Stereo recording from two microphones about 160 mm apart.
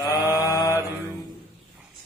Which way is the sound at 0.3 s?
20° left (ahead or behind).